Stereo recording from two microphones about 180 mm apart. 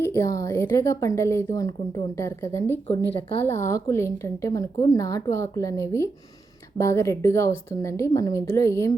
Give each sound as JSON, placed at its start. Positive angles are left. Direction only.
{"t": 0.0, "sound": "a woman's voice", "side_deg": 15}